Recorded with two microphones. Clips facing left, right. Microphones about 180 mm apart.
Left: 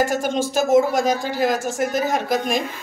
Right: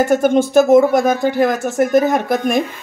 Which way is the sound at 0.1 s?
60° right (ahead or behind).